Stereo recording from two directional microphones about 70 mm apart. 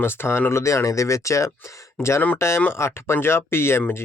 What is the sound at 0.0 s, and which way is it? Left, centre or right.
Speech, left.